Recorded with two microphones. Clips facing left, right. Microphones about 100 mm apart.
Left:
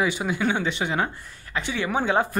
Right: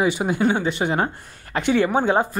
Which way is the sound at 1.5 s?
55° right (ahead or behind).